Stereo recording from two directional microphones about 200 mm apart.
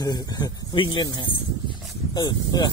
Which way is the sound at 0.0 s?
20° left (ahead or behind).